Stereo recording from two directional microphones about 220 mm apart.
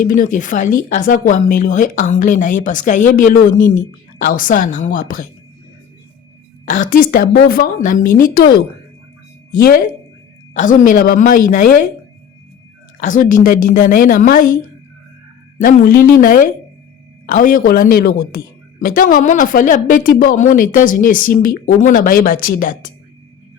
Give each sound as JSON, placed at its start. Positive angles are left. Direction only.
{"t": 0.0, "sound": "a woman's voice", "side_deg": 35}
{"t": 6.7, "sound": "a woman's voice", "side_deg": 40}
{"t": 13.0, "sound": "a woman's voice", "side_deg": 35}
{"t": 15.6, "sound": "a woman's voice", "side_deg": 40}